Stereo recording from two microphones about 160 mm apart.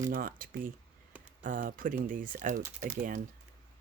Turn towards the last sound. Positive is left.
turn(degrees=-55)  # may be behind; listen again after turning